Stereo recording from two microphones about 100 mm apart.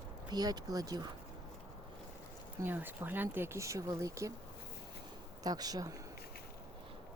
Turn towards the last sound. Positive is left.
turn(degrees=-40)  # may be behind; listen again after turning